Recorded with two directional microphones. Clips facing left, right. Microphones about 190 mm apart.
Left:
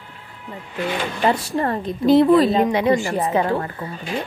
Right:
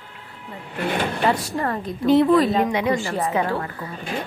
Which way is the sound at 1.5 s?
30° left (ahead or behind).